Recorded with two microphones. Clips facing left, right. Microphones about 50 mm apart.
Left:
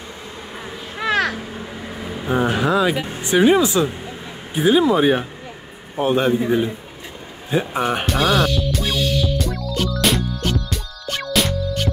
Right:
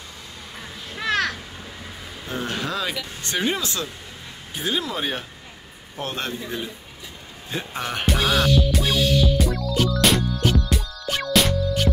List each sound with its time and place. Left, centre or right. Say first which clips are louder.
0.9 s crow: left 4 dB; centre
2.0 s speech: left 10 dB; left
7.5 s speech: left 8 dB; centre
8.1 s music: even; centre